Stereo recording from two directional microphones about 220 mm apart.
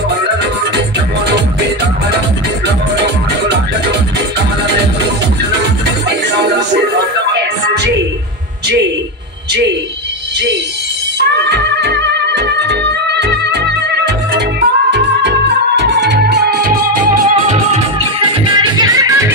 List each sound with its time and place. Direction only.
11.1 s music: 50° right (ahead or behind)
18.6 s music: 15° right (ahead or behind)